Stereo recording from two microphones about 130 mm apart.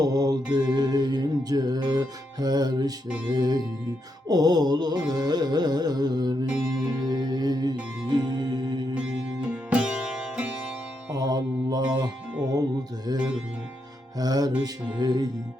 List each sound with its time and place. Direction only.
0.0 s mantra: 30° right (ahead or behind)
0.5 s music: 30° right (ahead or behind)
9.0 s music: 10° right (ahead or behind)
11.1 s mantra: 30° right (ahead or behind)
12.4 s music: 30° right (ahead or behind)